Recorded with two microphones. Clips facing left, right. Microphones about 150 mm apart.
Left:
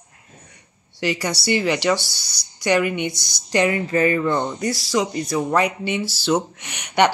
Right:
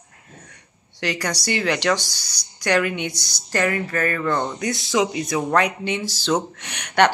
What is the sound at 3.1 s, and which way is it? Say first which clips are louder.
Speech: right 2 dB; 10° right (ahead or behind).